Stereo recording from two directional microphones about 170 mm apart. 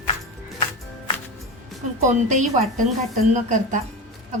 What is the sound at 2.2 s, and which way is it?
A woman's voice, 45° right (ahead or behind).